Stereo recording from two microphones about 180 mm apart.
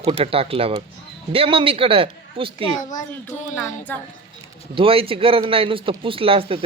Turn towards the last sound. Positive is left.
turn(degrees=-30)  # may be behind; listen again after turning